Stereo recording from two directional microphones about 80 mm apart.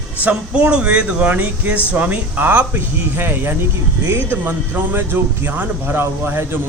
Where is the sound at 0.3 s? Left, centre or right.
Centre.